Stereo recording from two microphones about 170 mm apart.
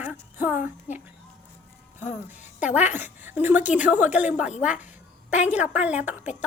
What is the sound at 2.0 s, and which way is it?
Speech, 45° left (ahead or behind).